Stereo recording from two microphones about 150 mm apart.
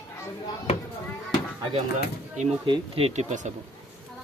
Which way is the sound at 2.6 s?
35° right (ahead or behind).